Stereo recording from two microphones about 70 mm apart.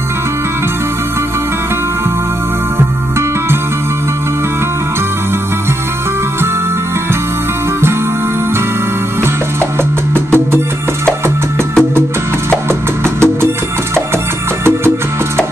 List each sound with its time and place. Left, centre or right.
10.1 s music: right
13.0 s music: right